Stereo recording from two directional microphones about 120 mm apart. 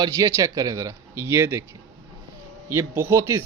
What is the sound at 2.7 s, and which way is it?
Speech, 20° right (ahead or behind).